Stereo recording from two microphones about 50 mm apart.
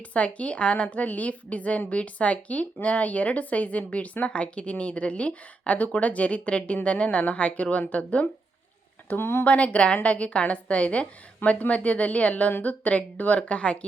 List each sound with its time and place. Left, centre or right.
0.1 s speech: left
9.0 s speech: left
9.4 s a woman's voice: left